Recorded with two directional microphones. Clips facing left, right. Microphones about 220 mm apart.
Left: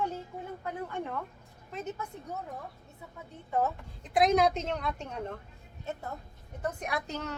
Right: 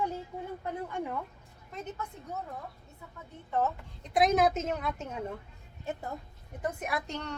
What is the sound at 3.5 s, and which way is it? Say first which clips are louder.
Speech: even; 10° left (ahead or behind).